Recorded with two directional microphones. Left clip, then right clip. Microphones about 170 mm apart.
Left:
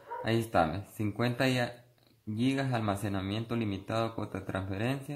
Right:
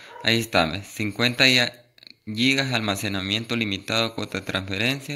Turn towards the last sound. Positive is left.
turn(degrees=-25)  # may be behind; listen again after turning